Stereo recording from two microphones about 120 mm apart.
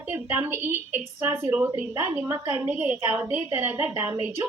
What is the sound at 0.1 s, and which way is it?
A woman's voice, 15° right (ahead or behind).